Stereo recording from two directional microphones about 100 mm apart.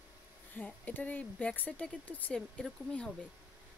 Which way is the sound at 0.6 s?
15° left (ahead or behind).